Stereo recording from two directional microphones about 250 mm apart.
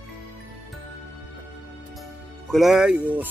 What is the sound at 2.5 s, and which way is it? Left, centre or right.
Speech, centre.